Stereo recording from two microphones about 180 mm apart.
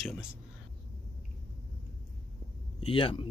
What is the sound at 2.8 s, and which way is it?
Speech, 30° left (ahead or behind).